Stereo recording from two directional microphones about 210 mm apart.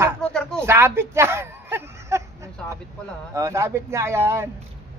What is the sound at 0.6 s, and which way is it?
Speech, 10° right (ahead or behind).